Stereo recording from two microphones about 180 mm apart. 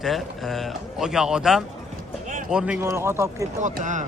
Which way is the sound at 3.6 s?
45° right (ahead or behind).